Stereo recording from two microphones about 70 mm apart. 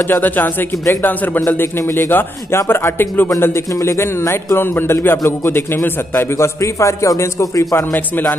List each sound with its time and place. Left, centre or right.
0.0 s speech: left
1.8 s a man's voice: left
6.1 s a man's voice: left